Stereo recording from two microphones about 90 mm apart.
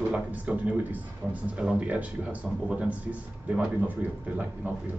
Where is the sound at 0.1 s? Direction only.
15° right (ahead or behind).